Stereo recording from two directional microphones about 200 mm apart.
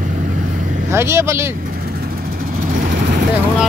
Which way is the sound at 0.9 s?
15° right (ahead or behind).